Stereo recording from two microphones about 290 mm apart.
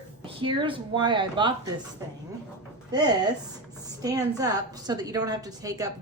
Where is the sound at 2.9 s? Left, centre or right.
Centre.